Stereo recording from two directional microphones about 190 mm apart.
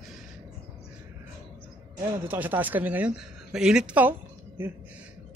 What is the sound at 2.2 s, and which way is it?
A woman's voice, 10° right (ahead or behind).